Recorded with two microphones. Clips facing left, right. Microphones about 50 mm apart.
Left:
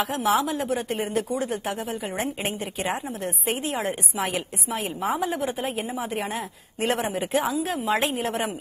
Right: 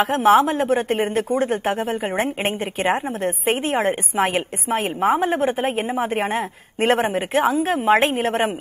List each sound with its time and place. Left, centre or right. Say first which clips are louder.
0.0 s speech: right 8 dB; right